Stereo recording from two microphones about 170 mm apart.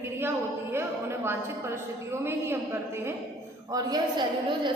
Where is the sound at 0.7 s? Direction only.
15° right (ahead or behind).